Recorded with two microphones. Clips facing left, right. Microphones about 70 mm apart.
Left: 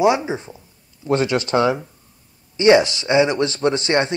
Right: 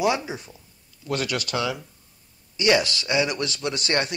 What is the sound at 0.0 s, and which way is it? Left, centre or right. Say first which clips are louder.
Speech: left 7 dB; left.